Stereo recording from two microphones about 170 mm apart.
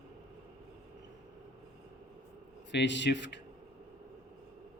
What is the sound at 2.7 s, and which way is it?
Speech, 90° left.